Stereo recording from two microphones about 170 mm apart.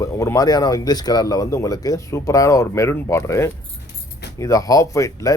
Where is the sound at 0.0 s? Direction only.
20° left (ahead or behind).